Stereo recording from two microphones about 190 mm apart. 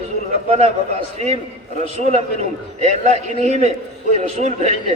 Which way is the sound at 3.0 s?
35° right (ahead or behind).